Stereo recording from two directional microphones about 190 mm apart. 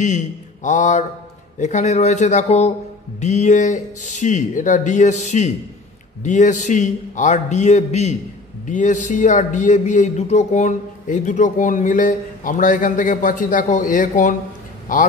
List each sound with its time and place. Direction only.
0.0 s a man's voice: 40° left (ahead or behind)